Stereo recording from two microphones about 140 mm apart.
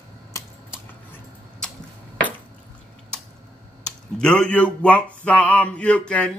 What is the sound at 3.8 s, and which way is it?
Speech, 5° left (ahead or behind).